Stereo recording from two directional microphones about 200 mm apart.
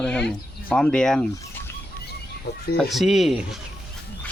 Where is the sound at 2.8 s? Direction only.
Centre (ahead or behind).